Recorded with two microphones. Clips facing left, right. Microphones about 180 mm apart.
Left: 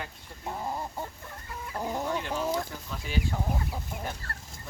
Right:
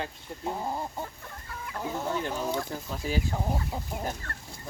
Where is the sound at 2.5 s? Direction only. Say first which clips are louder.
Right 1 dB; 35° right (ahead or behind).